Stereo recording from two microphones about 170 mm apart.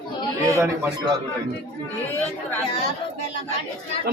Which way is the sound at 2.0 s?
10° left (ahead or behind).